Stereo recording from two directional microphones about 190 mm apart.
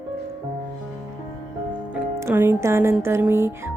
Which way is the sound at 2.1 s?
10° right (ahead or behind).